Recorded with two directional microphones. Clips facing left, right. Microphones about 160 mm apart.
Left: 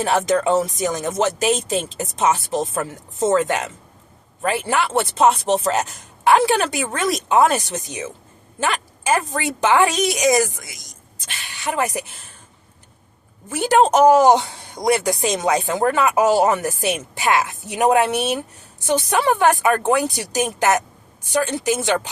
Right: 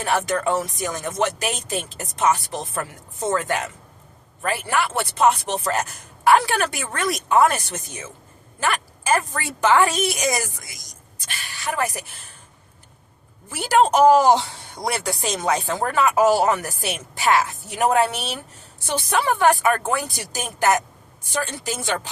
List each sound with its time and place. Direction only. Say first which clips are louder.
0.0 s speech: left 4 dB; 20° left (ahead or behind)
9.0 s speech: left 2 dB; 20° left (ahead or behind)
13.5 s speech: left 2 dB; 20° left (ahead or behind)